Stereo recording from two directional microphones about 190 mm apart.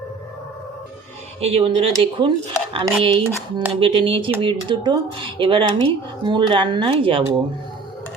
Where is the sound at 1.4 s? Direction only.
30° right (ahead or behind).